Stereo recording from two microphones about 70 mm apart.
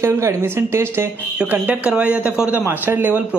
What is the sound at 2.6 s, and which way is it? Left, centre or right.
Speech, right.